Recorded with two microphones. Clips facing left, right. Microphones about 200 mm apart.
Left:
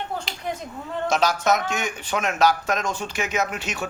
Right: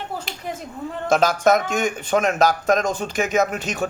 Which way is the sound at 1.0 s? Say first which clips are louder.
Right 4 dB; 55° right (ahead or behind).